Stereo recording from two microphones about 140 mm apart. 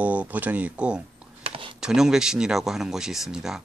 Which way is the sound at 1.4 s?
40° right (ahead or behind).